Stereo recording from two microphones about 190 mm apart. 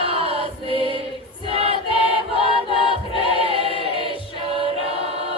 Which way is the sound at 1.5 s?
30° right (ahead or behind).